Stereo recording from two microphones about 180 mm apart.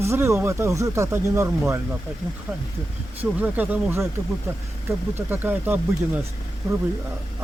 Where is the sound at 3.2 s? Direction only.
10° right (ahead or behind).